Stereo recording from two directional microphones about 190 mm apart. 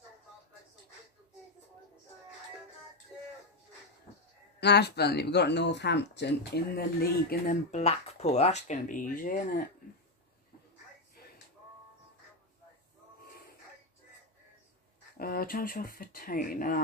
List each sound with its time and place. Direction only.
4.6 s speech: 60° left (ahead or behind)
7.7 s speech: 35° left (ahead or behind)
15.1 s speech: 50° left (ahead or behind)